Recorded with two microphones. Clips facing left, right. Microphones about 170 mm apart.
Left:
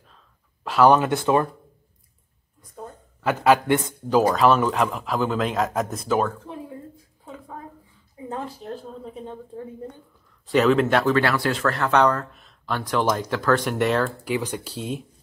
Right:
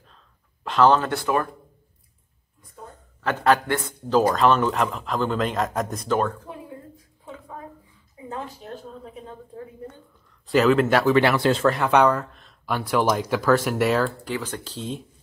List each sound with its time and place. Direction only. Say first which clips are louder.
0.7 s speech: left 2 dB; 10° left (ahead or behind)
3.2 s a man's voice: left 2 dB; 10° left (ahead or behind)
8.3 s a sound: left 2 dB; 35° left (ahead or behind)
10.4 s a man's voice: even; centre (ahead or behind)
11.1 s speech: right 3 dB; 20° right (ahead or behind)
12.3 s a sound: left 1 dB; 5° left (ahead or behind)
12.6 s speech: right 1 dB; 10° right (ahead or behind)
14.2 s speech: left 3 dB; 15° left (ahead or behind)